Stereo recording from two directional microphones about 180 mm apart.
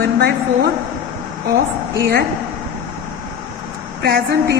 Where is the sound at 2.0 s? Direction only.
60° right (ahead or behind).